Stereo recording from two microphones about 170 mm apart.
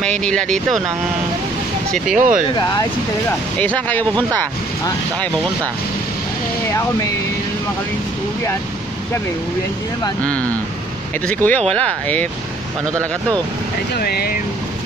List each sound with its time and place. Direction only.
0.0 s speech: 5° left (ahead or behind)
2.1 s speech: 50° right (ahead or behind)
2.5 s speech: 25° left (ahead or behind)
3.5 s speech: 10° left (ahead or behind)
11.2 s speech: 10° left (ahead or behind)
13.9 s speech: 65° left (ahead or behind)